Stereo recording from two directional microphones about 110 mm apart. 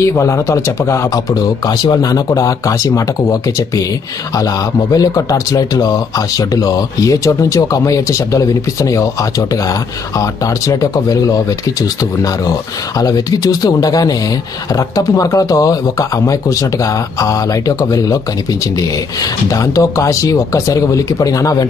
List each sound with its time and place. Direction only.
0.0 s a man's voice: 25° left (ahead or behind)